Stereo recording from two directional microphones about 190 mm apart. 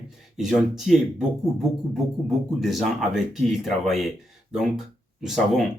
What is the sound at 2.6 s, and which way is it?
Speech, centre (ahead or behind).